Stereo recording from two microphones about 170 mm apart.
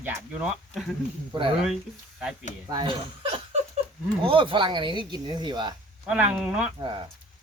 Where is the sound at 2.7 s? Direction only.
25° right (ahead or behind).